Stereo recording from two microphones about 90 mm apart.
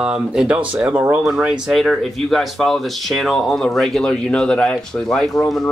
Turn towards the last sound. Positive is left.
turn(degrees=5)  # may be behind; listen again after turning